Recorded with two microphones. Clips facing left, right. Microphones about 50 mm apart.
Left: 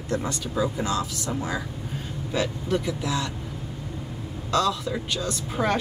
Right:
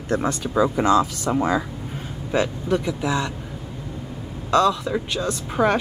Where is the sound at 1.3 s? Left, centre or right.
Right.